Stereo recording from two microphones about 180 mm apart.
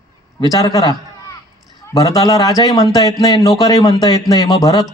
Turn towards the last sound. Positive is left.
turn(degrees=20)  # may be behind; listen again after turning